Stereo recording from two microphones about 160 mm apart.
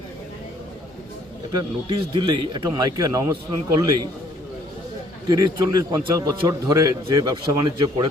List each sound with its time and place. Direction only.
2.1 s a man's voice: 30° right (ahead or behind)
5.3 s a man's voice: 25° right (ahead or behind)